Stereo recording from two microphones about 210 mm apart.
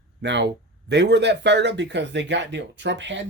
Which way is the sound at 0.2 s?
55° right (ahead or behind).